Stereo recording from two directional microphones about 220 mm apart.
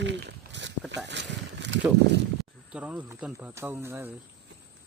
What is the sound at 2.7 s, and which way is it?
Speech, 5° right (ahead or behind).